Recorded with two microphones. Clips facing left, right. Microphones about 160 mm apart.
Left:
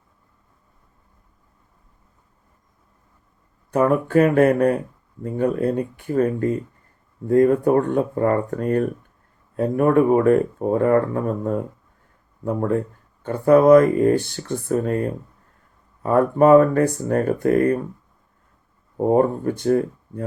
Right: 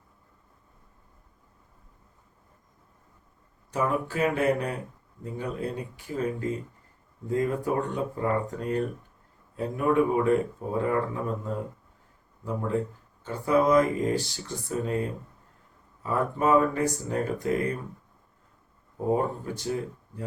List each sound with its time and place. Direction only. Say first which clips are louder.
3.7 s speech: left 9 dB; 55° left (ahead or behind)
13.2 s speech: left 10 dB; 55° left (ahead or behind)
16.0 s speech: left 10 dB; 55° left (ahead or behind)
18.9 s speech: left 9 dB; 55° left (ahead or behind)